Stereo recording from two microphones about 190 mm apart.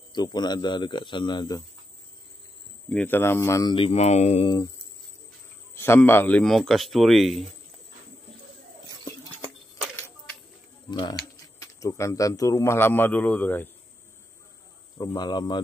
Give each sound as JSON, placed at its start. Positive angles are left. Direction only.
{"t": 0.1, "sound": "speech", "side_deg": 20}
{"t": 2.9, "sound": "speech", "side_deg": 10}
{"t": 3.7, "sound": "speech", "side_deg": 30}
{"t": 5.8, "sound": "speech", "side_deg": 10}
{"t": 10.9, "sound": "speech", "side_deg": 25}
{"t": 15.0, "sound": "speech", "side_deg": 20}